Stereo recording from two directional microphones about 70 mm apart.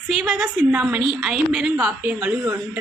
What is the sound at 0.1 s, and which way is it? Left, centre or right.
Speech, centre.